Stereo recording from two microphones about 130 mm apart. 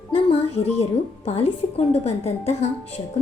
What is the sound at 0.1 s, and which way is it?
Music, 50° left (ahead or behind).